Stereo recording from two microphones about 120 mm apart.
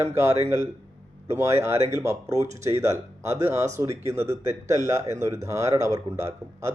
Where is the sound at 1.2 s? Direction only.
25° right (ahead or behind).